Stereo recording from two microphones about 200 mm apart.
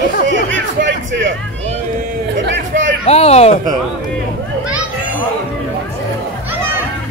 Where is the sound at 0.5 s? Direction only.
65° right (ahead or behind).